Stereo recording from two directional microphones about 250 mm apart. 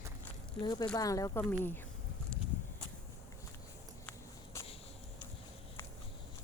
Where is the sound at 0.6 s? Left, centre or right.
Centre.